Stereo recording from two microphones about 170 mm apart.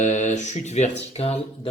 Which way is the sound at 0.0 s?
45° left (ahead or behind).